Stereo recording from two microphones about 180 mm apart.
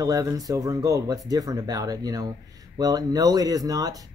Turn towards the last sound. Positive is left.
turn(degrees=-20)  # may be behind; listen again after turning